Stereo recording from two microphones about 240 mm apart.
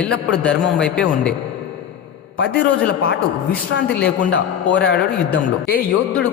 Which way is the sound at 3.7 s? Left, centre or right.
Left.